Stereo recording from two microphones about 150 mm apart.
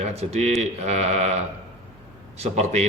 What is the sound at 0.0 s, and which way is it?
Speech, 45° right (ahead or behind).